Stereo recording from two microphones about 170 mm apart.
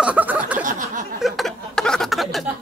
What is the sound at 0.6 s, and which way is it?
Speech, 50° right (ahead or behind).